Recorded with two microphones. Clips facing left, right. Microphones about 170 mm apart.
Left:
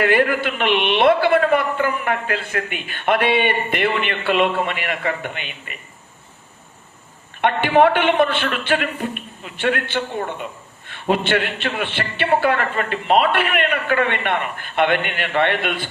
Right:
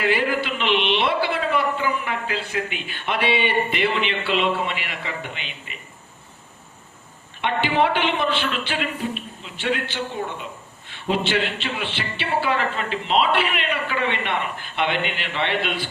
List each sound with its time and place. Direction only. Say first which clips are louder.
0.0 s a man's voice: left 5 dB; 55° left (ahead or behind)
7.4 s a man's voice: left 6 dB; 55° left (ahead or behind)